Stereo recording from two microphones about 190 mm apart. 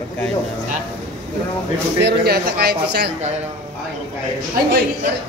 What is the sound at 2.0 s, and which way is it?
Speech, 60° right (ahead or behind).